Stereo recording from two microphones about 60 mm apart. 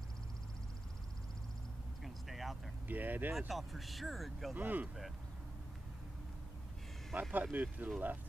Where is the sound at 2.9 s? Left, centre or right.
Right.